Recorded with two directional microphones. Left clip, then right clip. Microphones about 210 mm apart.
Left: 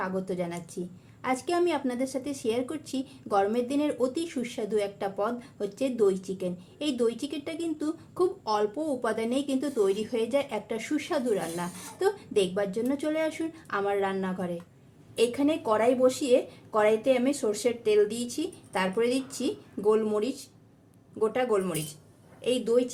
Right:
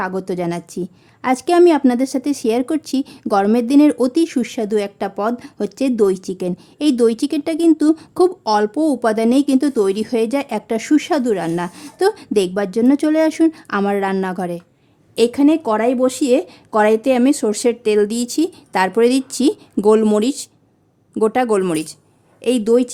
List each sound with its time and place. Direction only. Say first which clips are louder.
0.0 s a woman's voice: right 10 dB; 45° right (ahead or behind)